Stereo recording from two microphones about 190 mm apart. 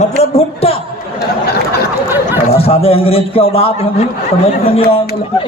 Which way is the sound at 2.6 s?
30° left (ahead or behind).